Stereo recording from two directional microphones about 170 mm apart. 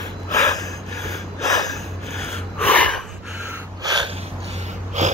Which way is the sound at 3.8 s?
25° right (ahead or behind).